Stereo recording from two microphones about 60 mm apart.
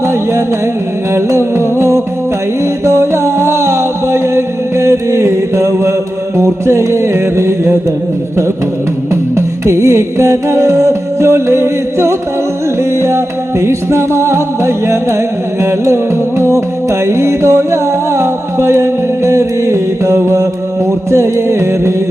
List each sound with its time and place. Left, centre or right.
1.1 s music: right
2.8 s music: right
9.3 s music: right